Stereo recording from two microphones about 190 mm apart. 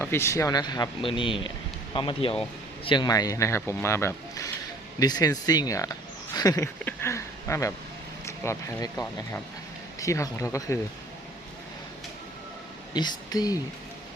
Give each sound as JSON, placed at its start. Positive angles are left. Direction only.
{"t": 0.0, "sound": "speech", "side_deg": 15}
{"t": 12.9, "sound": "speech", "side_deg": 20}